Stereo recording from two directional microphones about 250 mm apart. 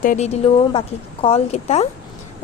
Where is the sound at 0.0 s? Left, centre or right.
Left.